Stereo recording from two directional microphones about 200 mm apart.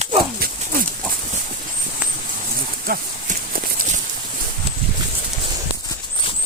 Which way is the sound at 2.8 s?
45° right (ahead or behind).